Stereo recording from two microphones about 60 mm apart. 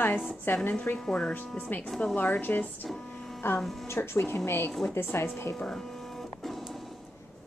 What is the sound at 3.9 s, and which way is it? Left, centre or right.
A woman's voice, left.